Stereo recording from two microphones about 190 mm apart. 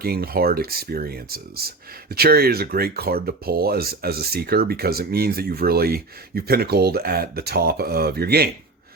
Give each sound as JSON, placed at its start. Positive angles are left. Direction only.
{"t": 0.0, "sound": "speech", "side_deg": -55}